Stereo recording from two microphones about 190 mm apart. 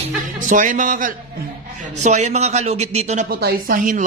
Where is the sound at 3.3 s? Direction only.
50° right (ahead or behind).